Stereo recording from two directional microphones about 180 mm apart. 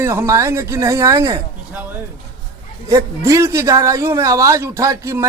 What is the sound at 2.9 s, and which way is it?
A man's voice, 20° right (ahead or behind).